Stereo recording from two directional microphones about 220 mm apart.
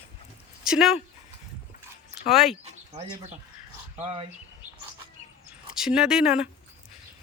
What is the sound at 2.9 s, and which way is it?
Speech, 30° right (ahead or behind).